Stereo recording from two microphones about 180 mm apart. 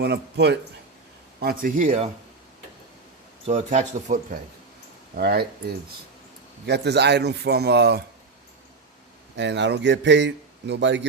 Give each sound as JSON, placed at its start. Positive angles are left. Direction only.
{"t": 0.0, "sound": "speech", "side_deg": -65}
{"t": 1.4, "sound": "speech", "side_deg": -55}
{"t": 3.4, "sound": "speech", "side_deg": -40}
{"t": 5.1, "sound": "speech", "side_deg": -60}
{"t": 9.3, "sound": "speech", "side_deg": -75}